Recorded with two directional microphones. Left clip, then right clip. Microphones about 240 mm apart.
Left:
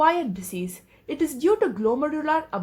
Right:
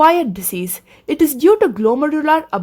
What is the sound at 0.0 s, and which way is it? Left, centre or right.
A woman's voice, right.